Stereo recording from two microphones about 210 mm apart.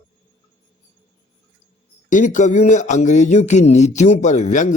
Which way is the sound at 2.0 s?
35° left (ahead or behind).